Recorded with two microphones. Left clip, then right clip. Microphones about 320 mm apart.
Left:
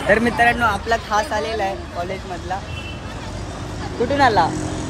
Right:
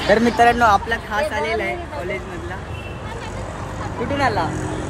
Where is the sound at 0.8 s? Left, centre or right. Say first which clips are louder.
Left 2 dB; centre.